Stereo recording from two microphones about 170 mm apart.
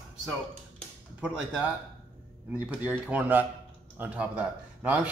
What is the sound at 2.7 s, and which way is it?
Speech, 10° right (ahead or behind).